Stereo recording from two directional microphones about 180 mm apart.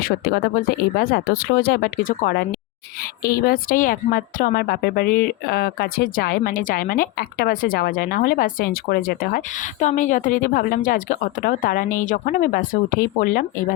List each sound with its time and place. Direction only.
0.0 s speech: 55° left (ahead or behind)